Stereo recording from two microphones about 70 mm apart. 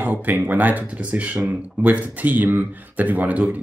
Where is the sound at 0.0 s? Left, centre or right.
Right.